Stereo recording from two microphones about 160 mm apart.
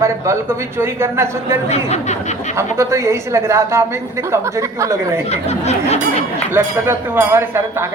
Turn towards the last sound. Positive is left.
turn(degrees=-15)  # may be behind; listen again after turning